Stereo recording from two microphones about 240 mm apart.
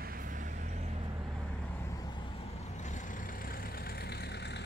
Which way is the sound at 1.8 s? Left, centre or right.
Centre.